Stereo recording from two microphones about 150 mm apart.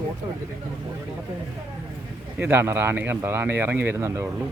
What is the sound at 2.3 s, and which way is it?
A man's voice, 15° right (ahead or behind).